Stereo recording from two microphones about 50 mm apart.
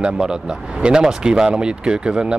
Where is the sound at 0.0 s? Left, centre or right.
Centre.